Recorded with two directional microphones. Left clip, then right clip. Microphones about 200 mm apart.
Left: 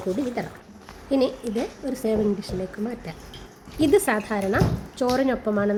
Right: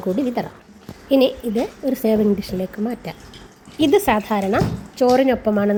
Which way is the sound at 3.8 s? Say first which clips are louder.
Right 4 dB; 10° right (ahead or behind).